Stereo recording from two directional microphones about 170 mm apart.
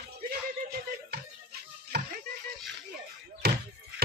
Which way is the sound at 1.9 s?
75° right (ahead or behind).